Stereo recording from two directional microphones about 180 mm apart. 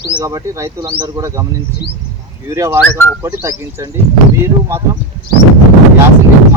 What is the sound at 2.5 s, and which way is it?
Speech, 15° right (ahead or behind).